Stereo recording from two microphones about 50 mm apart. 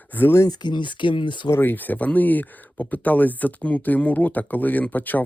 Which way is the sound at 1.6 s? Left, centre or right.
Left.